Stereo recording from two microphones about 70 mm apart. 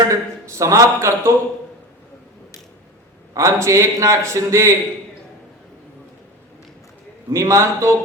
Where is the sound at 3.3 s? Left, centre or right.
Right.